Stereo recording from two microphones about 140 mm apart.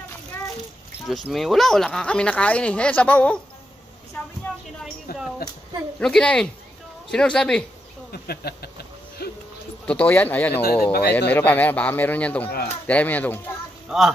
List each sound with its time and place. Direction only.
1.0 s speech: centre (ahead or behind)
5.9 s speech: 5° left (ahead or behind)
8.1 s owl: 90° left
9.8 s speech: 10° left (ahead or behind)
10.7 s speech: 90° left
11.1 s speech: 10° left (ahead or behind)
13.8 s speech: centre (ahead or behind)